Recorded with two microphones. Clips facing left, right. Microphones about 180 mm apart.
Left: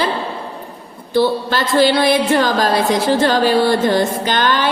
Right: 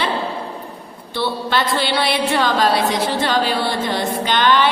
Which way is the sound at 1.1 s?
45° left (ahead or behind).